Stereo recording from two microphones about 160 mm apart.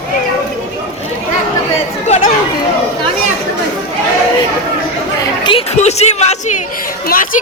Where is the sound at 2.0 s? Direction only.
45° left (ahead or behind).